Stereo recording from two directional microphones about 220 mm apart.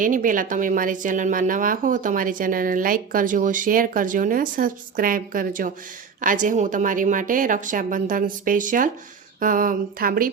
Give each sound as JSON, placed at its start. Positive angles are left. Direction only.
{"t": 0.0, "sound": "speech", "side_deg": -35}